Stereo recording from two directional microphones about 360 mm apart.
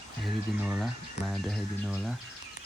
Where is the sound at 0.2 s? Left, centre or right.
Centre.